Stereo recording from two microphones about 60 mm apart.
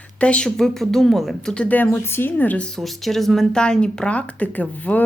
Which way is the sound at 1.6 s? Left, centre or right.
Left.